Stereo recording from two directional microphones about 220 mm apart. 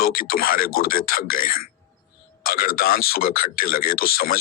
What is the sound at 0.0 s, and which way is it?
A man's voice, 40° left (ahead or behind).